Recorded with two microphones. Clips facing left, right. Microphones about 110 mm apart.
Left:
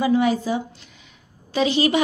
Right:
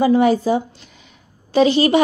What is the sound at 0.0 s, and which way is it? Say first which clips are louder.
A woman's voice: right 5 dB; 40° right (ahead or behind).